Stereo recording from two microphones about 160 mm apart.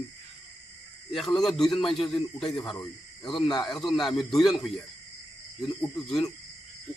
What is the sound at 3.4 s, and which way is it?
Speech, 30° left (ahead or behind).